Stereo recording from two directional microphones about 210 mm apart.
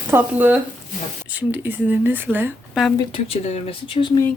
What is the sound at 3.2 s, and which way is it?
Speech, 30° left (ahead or behind).